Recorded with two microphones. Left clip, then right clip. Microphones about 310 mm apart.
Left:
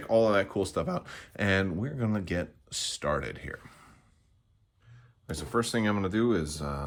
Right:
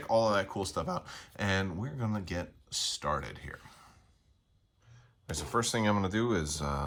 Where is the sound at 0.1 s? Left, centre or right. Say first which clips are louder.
Left 3 dB; centre.